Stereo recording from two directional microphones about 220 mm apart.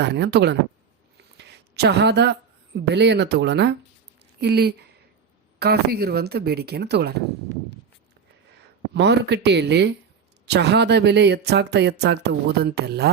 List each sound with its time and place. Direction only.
0.0 s speech: 50° right (ahead or behind)
8.9 s speech: 50° right (ahead or behind)